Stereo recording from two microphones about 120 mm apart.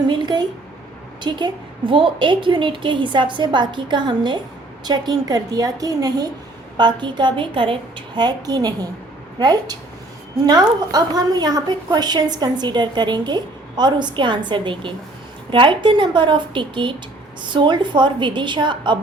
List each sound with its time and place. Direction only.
0.1 s a woman's voice: 40° right (ahead or behind)